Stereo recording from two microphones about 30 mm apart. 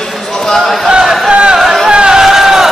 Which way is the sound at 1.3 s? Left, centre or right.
Right.